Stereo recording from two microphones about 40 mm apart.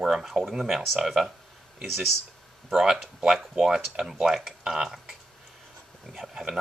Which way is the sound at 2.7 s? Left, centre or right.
Centre.